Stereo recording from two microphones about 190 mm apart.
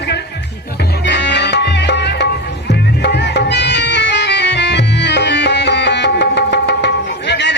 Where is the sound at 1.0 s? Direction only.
65° left (ahead or behind).